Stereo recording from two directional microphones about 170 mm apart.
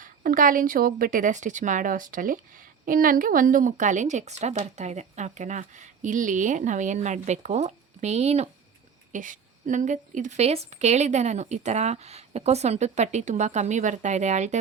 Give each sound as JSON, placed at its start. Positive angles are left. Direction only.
{"t": 0.0, "sound": "speech", "side_deg": -55}